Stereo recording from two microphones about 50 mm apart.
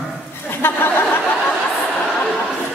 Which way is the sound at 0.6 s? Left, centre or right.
Left.